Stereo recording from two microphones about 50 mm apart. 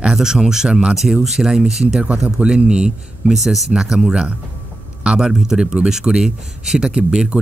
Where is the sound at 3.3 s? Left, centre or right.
Centre.